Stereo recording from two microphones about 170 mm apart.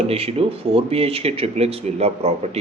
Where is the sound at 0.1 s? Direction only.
35° right (ahead or behind).